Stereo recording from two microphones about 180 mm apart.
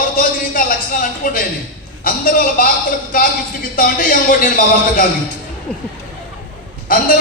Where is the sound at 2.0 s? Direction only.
50° left (ahead or behind).